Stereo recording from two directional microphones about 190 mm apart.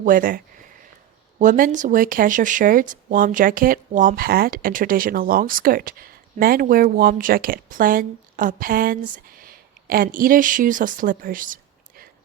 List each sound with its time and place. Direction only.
0.0 s speech: 45° right (ahead or behind)